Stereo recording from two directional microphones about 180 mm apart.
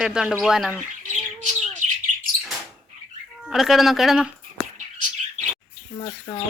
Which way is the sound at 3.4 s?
Centre (ahead or behind).